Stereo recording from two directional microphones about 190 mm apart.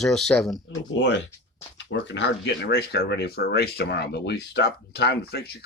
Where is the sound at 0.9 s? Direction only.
70° left (ahead or behind).